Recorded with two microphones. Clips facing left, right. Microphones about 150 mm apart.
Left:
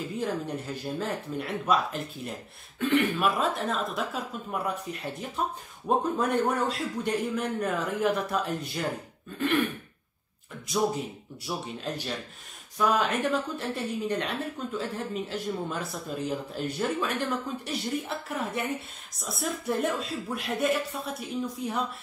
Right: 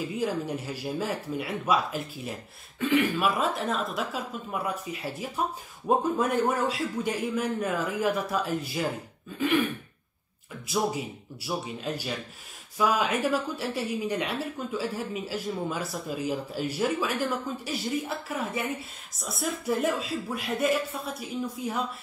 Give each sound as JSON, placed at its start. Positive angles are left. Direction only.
{"t": 0.1, "sound": "speech", "side_deg": -5}
{"t": 10.7, "sound": "speech", "side_deg": -5}